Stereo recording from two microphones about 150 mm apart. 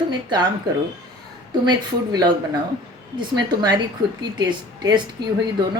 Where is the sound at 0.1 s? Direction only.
30° right (ahead or behind).